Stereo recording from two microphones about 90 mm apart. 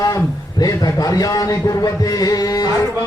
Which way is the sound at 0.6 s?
45° left (ahead or behind).